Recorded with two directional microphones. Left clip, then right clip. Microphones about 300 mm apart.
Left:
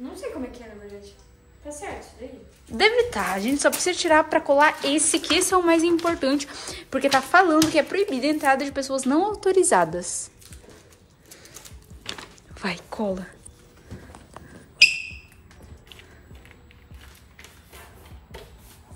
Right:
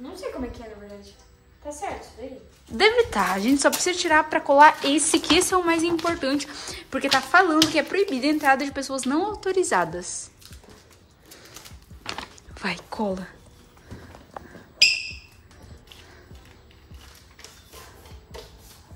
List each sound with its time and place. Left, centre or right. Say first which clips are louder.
2.8 s a woman's voice: right 1 dB; centre
11.2 s a sound: right 1 dB; centre
12.5 s speech: right 1 dB; centre